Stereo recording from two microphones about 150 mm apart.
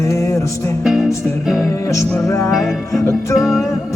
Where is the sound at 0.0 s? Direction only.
20° left (ahead or behind).